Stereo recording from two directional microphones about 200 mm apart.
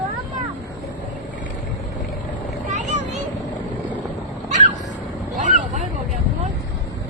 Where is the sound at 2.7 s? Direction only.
35° right (ahead or behind).